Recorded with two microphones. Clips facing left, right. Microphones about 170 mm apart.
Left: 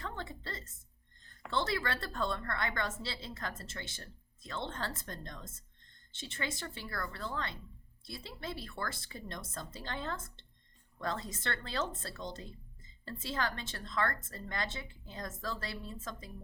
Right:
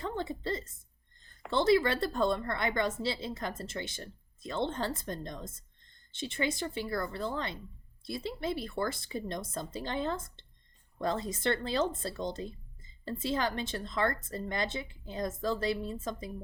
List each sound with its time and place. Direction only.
0.0 s a woman's voice: 20° right (ahead or behind)